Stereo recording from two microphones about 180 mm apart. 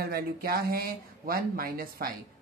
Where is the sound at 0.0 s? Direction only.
60° right (ahead or behind).